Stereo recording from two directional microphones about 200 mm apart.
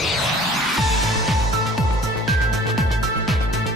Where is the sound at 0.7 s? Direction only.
Centre (ahead or behind).